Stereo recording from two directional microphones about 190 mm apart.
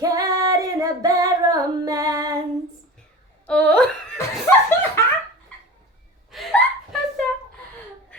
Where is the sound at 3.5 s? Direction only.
5° left (ahead or behind).